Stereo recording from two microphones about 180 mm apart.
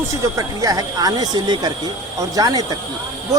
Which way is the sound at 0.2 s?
20° right (ahead or behind).